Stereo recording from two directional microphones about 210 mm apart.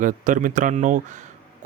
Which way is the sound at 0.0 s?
40° right (ahead or behind).